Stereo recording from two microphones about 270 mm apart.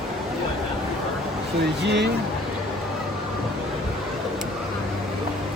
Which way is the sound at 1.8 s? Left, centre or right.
Right.